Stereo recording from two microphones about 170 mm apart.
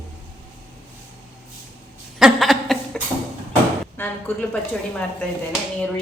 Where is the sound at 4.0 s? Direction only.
10° left (ahead or behind).